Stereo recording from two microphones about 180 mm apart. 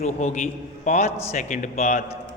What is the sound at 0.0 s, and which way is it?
A man's voice, 40° left (ahead or behind).